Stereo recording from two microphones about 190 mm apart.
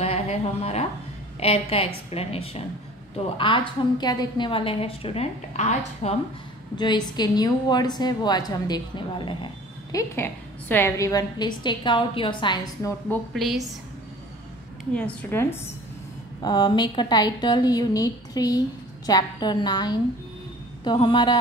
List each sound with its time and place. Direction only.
0.0 s a woman's voice: 35° left (ahead or behind)
6.8 s a woman's voice: 20° left (ahead or behind)
9.9 s a woman's voice: 10° left (ahead or behind)
13.1 s a woman's voice: centre (ahead or behind)
15.0 s a woman's voice: 10° left (ahead or behind)
16.4 s a woman's voice: 25° left (ahead or behind)